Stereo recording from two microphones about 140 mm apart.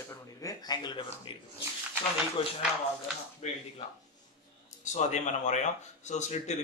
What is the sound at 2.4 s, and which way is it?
Speech, 45° left (ahead or behind).